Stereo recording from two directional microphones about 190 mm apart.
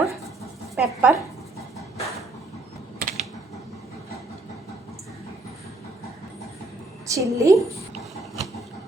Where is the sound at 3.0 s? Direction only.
45° right (ahead or behind).